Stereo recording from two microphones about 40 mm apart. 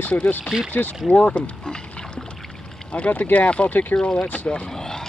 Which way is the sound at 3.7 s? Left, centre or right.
Left.